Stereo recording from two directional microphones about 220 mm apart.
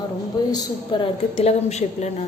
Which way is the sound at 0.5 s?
25° left (ahead or behind).